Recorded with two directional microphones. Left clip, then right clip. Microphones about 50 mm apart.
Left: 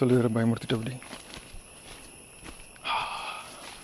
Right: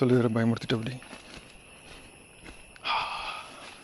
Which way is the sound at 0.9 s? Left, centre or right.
Left.